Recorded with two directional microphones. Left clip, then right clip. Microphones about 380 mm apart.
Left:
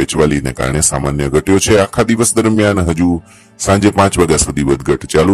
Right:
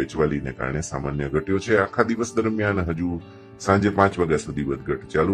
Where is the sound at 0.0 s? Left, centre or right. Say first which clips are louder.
Left 10 dB; left.